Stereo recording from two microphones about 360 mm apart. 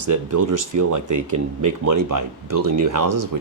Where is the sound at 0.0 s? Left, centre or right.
Right.